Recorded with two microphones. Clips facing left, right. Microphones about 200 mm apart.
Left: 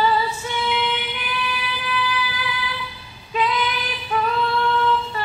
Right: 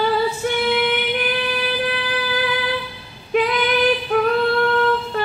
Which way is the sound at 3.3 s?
65° right (ahead or behind).